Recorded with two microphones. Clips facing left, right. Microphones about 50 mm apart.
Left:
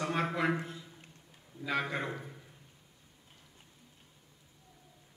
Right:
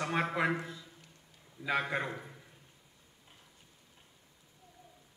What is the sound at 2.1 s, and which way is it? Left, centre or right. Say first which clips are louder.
Speech: left 1 dB; centre.